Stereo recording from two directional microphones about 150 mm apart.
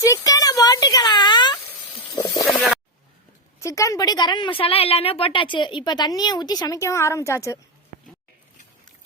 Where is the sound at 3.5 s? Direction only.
20° left (ahead or behind).